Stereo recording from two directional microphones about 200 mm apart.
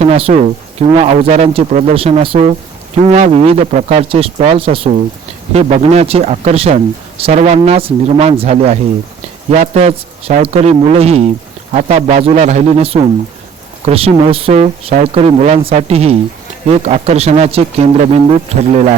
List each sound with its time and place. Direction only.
0.0 s speech: 30° right (ahead or behind)